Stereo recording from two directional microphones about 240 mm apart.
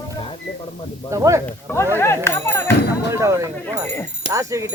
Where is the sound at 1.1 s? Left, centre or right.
Centre.